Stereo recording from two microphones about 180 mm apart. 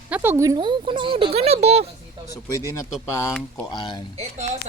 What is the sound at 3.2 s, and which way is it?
Speech, 10° left (ahead or behind).